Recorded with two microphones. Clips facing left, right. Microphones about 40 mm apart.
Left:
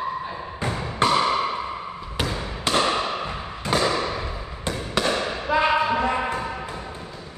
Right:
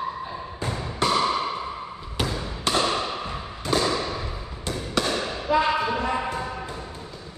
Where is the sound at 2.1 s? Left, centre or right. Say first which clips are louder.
Even; centre.